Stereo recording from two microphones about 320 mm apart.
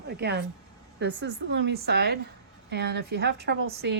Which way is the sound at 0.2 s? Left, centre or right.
Right.